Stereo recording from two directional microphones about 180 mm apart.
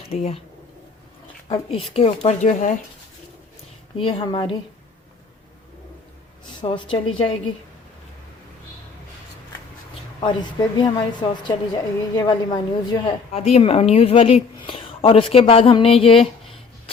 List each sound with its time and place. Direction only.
0.1 s a woman's voice: 35° left (ahead or behind)
1.5 s a woman's voice: 35° left (ahead or behind)
3.9 s a woman's voice: 30° left (ahead or behind)
6.6 s a woman's voice: 30° left (ahead or behind)
10.8 s a woman's voice: 25° left (ahead or behind)